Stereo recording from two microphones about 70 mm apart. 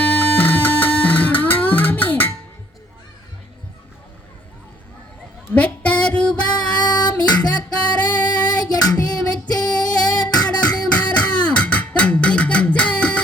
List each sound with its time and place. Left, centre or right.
0.0 s music: left
5.5 s music: centre
6.5 s child singing: left
8.0 s music: left
8.4 s child singing: left
10.3 s beatboxing: left
10.8 s beatboxing: centre